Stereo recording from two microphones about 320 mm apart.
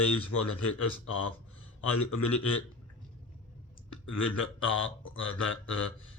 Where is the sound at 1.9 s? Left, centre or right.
Left.